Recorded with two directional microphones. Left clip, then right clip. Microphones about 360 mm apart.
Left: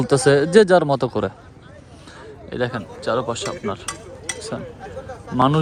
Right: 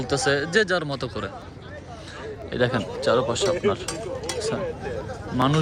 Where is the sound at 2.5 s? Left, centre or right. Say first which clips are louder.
Right 1 dB; centre.